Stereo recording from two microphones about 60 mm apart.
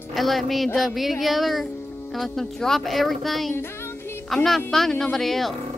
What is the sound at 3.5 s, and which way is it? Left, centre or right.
Music, left.